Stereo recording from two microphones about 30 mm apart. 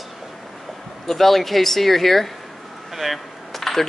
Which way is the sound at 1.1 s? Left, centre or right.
Centre.